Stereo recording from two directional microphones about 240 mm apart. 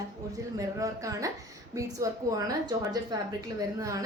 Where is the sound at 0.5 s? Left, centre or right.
Centre.